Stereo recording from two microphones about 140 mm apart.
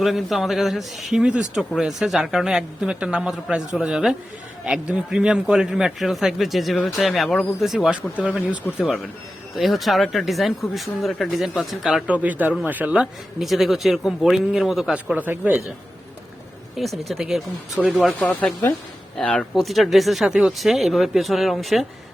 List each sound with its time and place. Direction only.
0.0 s speech: centre (ahead or behind)
8.7 s speech: 20° left (ahead or behind)
9.6 s speech: centre (ahead or behind)
16.7 s speech: centre (ahead or behind)
18.2 s speech: 10° left (ahead or behind)